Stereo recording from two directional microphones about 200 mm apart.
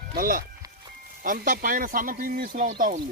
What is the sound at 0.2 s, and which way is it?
Speech, 45° right (ahead or behind).